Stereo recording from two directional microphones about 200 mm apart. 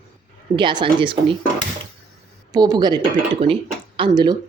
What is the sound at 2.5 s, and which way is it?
Speech, 20° right (ahead or behind).